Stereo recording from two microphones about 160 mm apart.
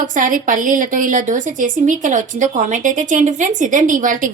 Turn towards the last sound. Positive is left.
turn(degrees=-55)  # may be behind; listen again after turning